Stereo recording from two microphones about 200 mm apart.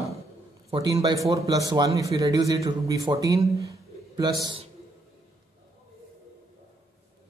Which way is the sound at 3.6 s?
20° right (ahead or behind).